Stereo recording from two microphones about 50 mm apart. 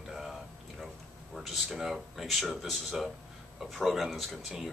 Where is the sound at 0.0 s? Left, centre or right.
Centre.